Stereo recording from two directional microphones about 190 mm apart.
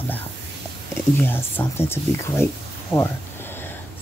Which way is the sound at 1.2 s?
10° left (ahead or behind).